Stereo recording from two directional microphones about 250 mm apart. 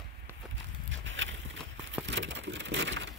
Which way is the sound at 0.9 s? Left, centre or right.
Right.